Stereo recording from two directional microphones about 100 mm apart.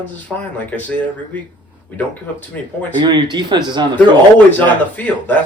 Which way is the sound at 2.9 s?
50° right (ahead or behind).